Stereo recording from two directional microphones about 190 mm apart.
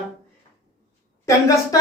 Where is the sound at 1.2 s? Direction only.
15° left (ahead or behind).